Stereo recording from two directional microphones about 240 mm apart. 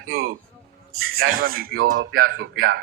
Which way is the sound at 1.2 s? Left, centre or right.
Right.